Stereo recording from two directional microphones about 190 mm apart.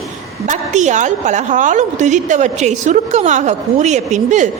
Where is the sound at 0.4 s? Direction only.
40° right (ahead or behind).